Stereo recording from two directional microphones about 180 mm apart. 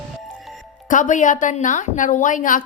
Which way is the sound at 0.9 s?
45° left (ahead or behind).